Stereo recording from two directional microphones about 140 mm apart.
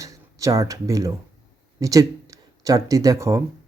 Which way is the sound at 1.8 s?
25° right (ahead or behind).